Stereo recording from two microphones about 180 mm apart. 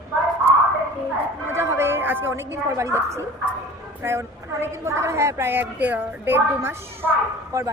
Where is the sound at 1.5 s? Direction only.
15° right (ahead or behind).